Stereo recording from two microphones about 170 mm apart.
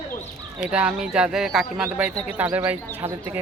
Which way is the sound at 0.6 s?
5° right (ahead or behind).